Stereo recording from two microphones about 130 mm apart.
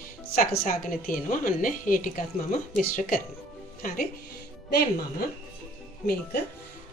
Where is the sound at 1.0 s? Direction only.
90° left.